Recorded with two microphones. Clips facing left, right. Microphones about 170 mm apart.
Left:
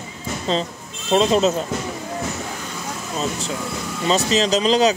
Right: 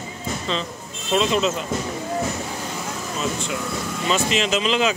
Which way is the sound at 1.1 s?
35° left (ahead or behind).